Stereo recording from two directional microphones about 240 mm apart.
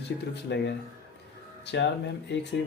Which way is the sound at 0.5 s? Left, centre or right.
Left.